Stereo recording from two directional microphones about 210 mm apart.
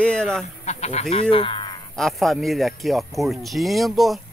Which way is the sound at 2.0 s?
Centre (ahead or behind).